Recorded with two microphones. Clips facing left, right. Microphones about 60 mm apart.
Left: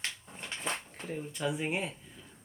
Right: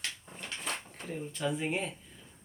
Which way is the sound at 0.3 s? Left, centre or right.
Left.